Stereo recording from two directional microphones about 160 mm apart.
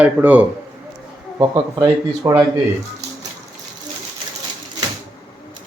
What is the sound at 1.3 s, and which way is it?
A man's voice, 20° right (ahead or behind).